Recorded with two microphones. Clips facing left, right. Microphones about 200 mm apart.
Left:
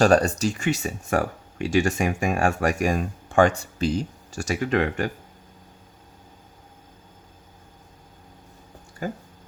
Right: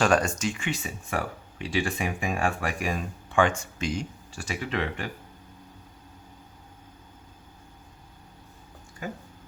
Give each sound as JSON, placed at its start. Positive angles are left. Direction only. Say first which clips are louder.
{"t": 0.0, "sound": "speech", "louder": "left 5 dB", "side_deg": 35}
{"t": 9.0, "sound": "speech", "louder": "left 5 dB", "side_deg": 40}